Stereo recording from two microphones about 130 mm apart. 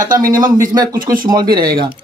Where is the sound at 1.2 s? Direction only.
35° right (ahead or behind).